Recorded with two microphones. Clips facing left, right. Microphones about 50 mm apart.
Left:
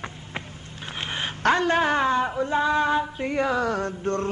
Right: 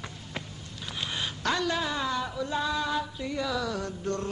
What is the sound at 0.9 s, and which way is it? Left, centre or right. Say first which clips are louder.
Speech: left 4 dB; left.